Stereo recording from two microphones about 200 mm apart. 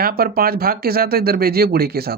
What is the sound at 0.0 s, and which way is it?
Speech, 50° right (ahead or behind).